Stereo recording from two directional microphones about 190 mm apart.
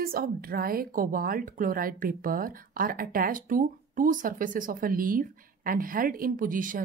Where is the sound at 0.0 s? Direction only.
50° right (ahead or behind).